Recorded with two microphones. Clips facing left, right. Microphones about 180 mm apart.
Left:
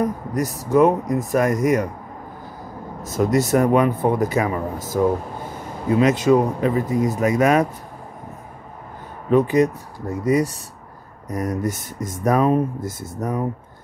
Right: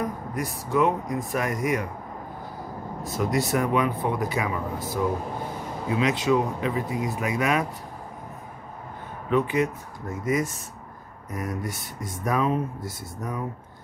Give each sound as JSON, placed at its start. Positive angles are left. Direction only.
{"t": 0.0, "sound": "speech", "side_deg": 40}
{"t": 3.0, "sound": "speech", "side_deg": 45}
{"t": 9.3, "sound": "speech", "side_deg": 40}